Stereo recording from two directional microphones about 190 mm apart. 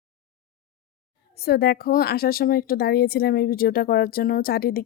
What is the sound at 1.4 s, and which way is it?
Speech, 55° left (ahead or behind).